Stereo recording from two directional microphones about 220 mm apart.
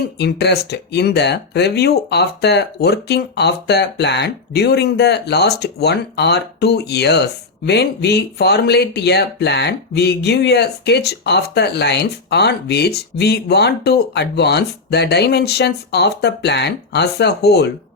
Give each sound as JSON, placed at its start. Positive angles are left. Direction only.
{"t": 0.2, "sound": "speech", "side_deg": 50}